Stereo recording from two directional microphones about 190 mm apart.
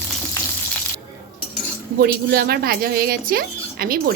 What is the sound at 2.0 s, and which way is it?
Speech, 50° right (ahead or behind).